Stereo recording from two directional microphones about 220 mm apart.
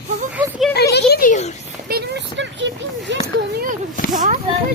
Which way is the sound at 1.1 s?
40° left (ahead or behind).